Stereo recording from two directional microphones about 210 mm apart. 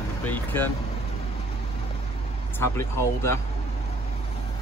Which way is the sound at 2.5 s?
15° left (ahead or behind).